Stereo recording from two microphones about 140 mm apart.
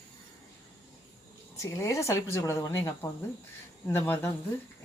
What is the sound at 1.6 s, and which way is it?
Speech, 25° left (ahead or behind).